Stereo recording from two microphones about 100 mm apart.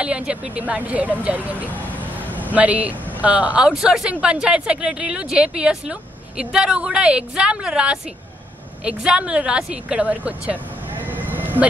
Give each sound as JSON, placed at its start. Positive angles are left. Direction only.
{"t": 0.0, "sound": "speech", "side_deg": -10}
{"t": 11.1, "sound": "sheep", "side_deg": -20}